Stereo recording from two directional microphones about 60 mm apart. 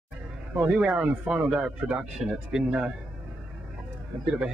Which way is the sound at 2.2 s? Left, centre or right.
Centre.